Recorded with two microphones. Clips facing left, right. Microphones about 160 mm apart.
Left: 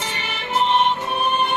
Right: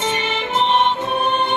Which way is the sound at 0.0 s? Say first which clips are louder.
Right 8 dB; 20° right (ahead or behind).